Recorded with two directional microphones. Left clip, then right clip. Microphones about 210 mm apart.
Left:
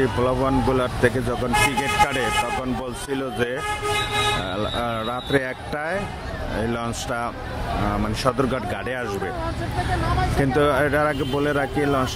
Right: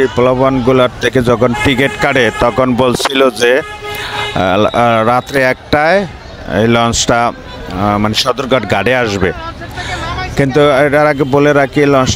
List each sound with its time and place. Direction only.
0.0 s speech: 40° right (ahead or behind)
10.4 s speech: 40° right (ahead or behind)